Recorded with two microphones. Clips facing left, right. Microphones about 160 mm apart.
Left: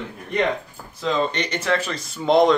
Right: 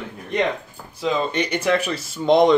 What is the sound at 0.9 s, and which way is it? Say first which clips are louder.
Speech: right 1 dB; 10° right (ahead or behind).